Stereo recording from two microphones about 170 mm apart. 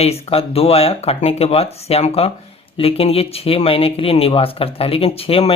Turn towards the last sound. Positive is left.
turn(degrees=35)  # may be behind; listen again after turning